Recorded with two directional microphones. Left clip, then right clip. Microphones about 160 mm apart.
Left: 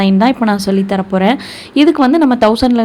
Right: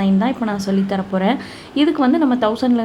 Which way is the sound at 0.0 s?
35° left (ahead or behind).